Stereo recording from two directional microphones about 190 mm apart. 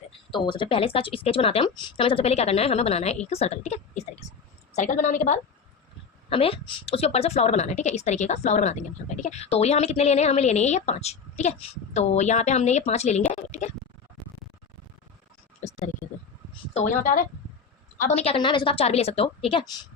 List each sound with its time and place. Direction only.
0.3 s a woman's voice: 25° left (ahead or behind); by 5.4 s 40° left (ahead or behind)
6.3 s a woman's voice: 30° left (ahead or behind)
16.7 s a woman's voice: 45° left (ahead or behind)
18.0 s a woman's voice: 35° left (ahead or behind)